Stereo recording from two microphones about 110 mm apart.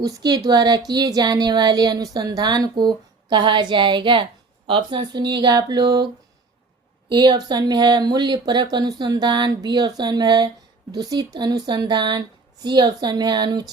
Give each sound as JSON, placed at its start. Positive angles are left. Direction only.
{"t": 0.0, "sound": "a woman's voice", "side_deg": -35}
{"t": 7.1, "sound": "a woman's voice", "side_deg": -40}